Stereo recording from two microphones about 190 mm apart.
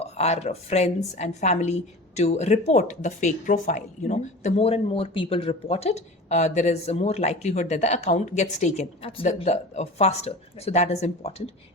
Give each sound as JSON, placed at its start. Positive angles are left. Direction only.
{"t": 0.0, "sound": "a woman's voice", "side_deg": 35}